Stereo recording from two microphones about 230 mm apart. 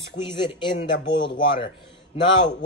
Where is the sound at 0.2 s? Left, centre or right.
Centre.